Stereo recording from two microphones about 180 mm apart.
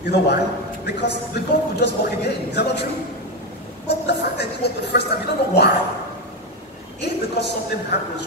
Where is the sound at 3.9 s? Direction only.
70° left (ahead or behind).